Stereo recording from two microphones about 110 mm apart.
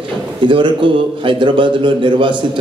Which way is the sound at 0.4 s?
50° right (ahead or behind).